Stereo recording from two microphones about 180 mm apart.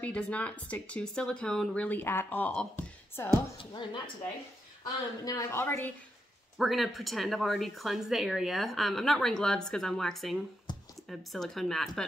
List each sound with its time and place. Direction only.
0.0 s speech: 5° left (ahead or behind)
3.5 s speech: 25° left (ahead or behind)
5.2 s speech: 20° left (ahead or behind)
6.6 s speech: centre (ahead or behind)
10.7 s a sound: 25° left (ahead or behind)
11.1 s speech: centre (ahead or behind)